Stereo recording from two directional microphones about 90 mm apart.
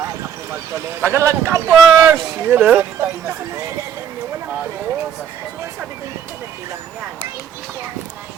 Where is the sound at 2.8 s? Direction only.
25° right (ahead or behind).